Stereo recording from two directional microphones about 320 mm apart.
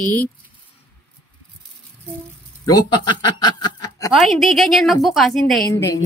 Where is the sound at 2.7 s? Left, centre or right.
Centre.